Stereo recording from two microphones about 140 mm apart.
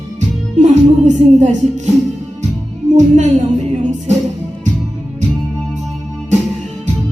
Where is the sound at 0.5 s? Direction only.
60° right (ahead or behind).